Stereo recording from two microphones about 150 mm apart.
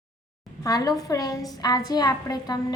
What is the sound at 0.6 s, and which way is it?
A woman's voice, 25° left (ahead or behind).